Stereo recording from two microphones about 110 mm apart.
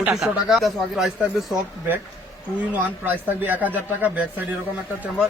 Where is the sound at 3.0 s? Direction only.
15° right (ahead or behind).